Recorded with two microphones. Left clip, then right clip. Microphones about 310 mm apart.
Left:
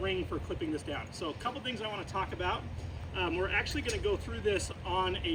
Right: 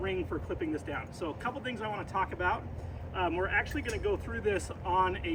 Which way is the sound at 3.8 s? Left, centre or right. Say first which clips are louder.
Even; right.